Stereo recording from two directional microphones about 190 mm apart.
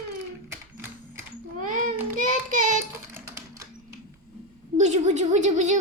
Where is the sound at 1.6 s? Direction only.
45° right (ahead or behind).